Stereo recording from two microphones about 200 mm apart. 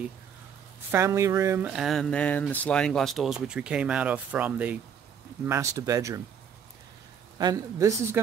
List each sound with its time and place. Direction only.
0.9 s speech: 15° right (ahead or behind)
7.3 s speech: 20° right (ahead or behind)